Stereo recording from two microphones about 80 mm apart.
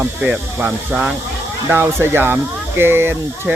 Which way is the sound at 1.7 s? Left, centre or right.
Right.